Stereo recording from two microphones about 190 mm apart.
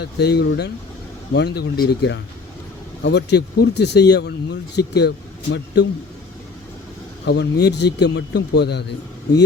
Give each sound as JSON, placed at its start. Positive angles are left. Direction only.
{"t": 0.0, "sound": "speech", "side_deg": 60}
{"t": 7.3, "sound": "speech", "side_deg": 65}